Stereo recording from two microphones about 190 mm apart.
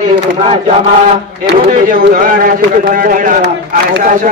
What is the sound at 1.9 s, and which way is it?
A man's voice, 50° right (ahead or behind).